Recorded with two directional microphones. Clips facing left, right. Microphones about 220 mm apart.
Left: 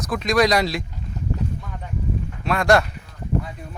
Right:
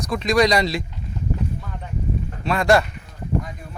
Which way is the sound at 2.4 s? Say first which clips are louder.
Even; centre (ahead or behind).